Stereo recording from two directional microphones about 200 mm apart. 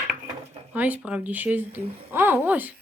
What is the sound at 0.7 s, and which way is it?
Speech, 10° right (ahead or behind).